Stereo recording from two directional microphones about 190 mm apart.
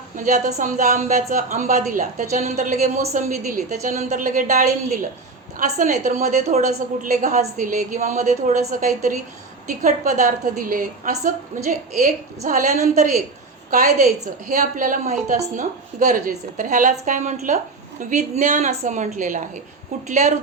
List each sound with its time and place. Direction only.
0.3 s a woman's voice: 40° right (ahead or behind)